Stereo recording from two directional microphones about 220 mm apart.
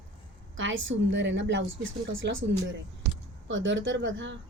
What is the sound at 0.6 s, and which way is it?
A woman's voice, 60° right (ahead or behind).